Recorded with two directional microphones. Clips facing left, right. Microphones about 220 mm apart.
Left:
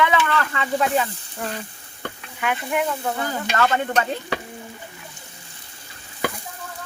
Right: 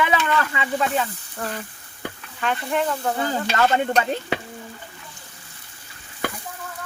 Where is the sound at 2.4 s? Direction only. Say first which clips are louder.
Even; 10° left (ahead or behind).